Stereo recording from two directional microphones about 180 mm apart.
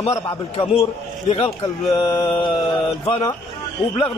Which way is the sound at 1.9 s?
20° left (ahead or behind).